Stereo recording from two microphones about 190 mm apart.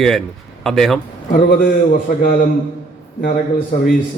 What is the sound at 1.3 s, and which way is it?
Speech, 50° left (ahead or behind).